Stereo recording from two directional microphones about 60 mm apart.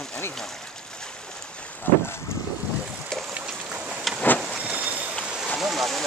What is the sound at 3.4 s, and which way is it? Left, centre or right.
Vehicle, centre.